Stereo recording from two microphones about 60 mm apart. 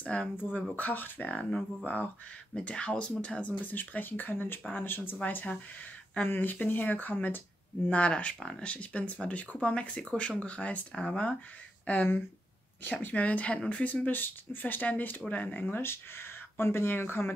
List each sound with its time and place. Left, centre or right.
0.0 s speech: left
1.3 s speech: centre; by 7.4 s left
7.9 s speech: left
15.8 s speech: left